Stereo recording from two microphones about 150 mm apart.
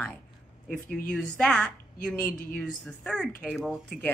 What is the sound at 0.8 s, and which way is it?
Speech, 80° left.